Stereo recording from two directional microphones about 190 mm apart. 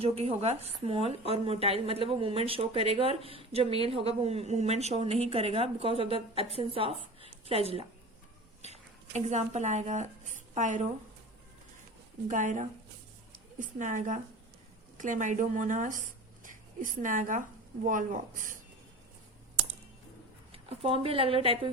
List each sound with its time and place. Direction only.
0.0 s speech: 30° right (ahead or behind)
12.3 s a woman's voice: 40° right (ahead or behind)
16.4 s a sound: 45° right (ahead or behind)
17.8 s a woman's voice: 45° right (ahead or behind)
20.5 s speech: 30° right (ahead or behind)